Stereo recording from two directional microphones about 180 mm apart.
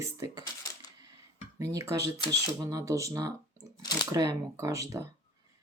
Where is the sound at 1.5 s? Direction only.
15° right (ahead or behind).